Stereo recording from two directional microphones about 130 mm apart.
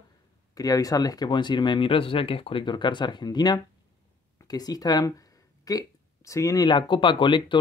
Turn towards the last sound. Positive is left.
turn(degrees=40)  # may be behind; listen again after turning